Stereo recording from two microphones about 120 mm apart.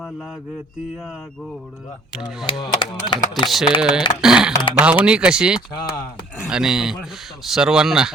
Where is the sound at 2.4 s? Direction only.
40° left (ahead or behind).